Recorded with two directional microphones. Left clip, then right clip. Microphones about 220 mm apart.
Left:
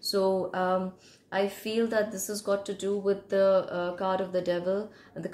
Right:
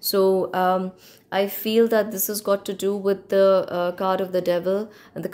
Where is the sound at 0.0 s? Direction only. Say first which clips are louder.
Right 7 dB; 45° right (ahead or behind).